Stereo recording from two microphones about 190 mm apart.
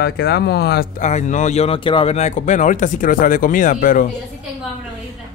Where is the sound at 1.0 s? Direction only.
40° left (ahead or behind).